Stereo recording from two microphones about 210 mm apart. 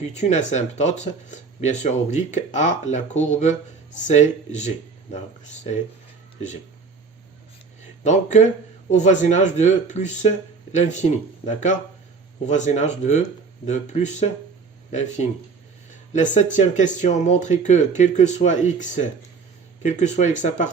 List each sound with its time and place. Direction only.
0.1 s speech: 35° left (ahead or behind)
8.0 s speech: 35° left (ahead or behind)
16.1 s speech: 35° left (ahead or behind)